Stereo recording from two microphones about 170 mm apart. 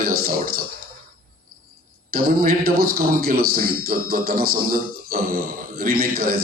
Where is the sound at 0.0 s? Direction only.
60° right (ahead or behind).